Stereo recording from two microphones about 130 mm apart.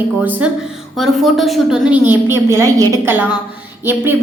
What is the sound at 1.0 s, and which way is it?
A woman's voice, centre (ahead or behind).